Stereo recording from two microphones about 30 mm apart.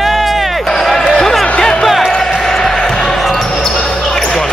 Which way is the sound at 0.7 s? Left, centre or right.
Centre.